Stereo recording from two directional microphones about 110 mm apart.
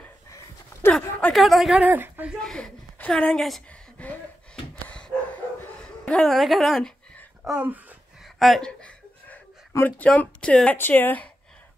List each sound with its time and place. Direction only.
1.3 s a woman's voice: centre (ahead or behind)
1.9 s speech: 15° right (ahead or behind)
2.4 s a woman's voice: 5° left (ahead or behind)
4.8 s dog: 10° left (ahead or behind)
5.6 s a sound: 10° left (ahead or behind)
7.4 s speech: 10° right (ahead or behind)
8.4 s a sound: centre (ahead or behind)
9.7 s a sound: 25° left (ahead or behind)
9.9 s speech: 10° left (ahead or behind)